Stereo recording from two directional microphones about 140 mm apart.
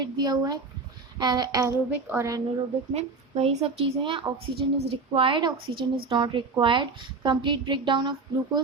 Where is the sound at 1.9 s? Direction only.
15° right (ahead or behind).